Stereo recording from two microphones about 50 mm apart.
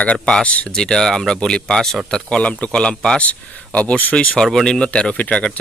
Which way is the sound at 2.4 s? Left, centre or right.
Left.